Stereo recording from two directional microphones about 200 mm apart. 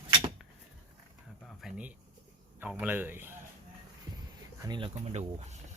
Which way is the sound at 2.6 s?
10° right (ahead or behind).